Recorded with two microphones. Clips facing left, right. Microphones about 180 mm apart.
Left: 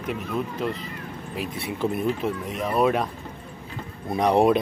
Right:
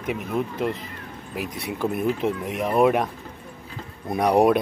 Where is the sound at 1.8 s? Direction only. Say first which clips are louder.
Right 1 dB; 15° right (ahead or behind).